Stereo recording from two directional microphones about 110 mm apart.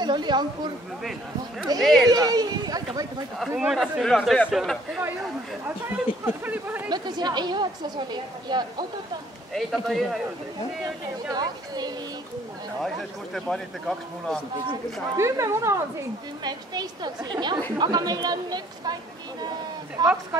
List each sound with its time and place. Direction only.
0.0 s a woman's voice: 40° right (ahead or behind)
1.8 s a man's voice: centre (ahead or behind)
2.0 s a woman's voice: 35° right (ahead or behind)
3.3 s speech: 5° right (ahead or behind)
4.0 s a man's voice: 5° left (ahead or behind)
6.2 s speech: 15° right (ahead or behind)
6.9 s a woman's voice: 40° right (ahead or behind)
9.5 s a man's voice: centre (ahead or behind)
11.3 s a woman's voice: 40° right (ahead or behind)
12.8 s a man's voice: 5° left (ahead or behind)
15.1 s speech: 25° right (ahead or behind)
16.4 s a woman's voice: 40° right (ahead or behind)
20.0 s a woman's voice: 40° right (ahead or behind)